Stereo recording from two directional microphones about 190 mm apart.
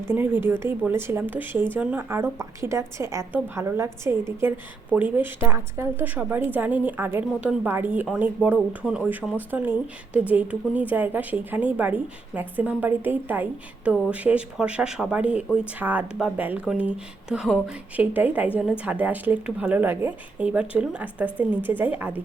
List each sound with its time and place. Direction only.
0.1 s speech: 10° right (ahead or behind)